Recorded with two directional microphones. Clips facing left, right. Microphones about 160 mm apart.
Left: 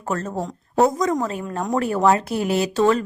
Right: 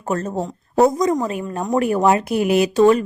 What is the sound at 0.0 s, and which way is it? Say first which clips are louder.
A woman's voice: right 3 dB; 15° right (ahead or behind).